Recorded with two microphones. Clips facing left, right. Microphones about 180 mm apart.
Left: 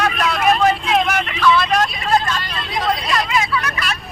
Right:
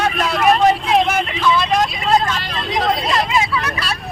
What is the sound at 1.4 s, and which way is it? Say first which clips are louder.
Vehicle: left 1 dB; 20° right (ahead or behind).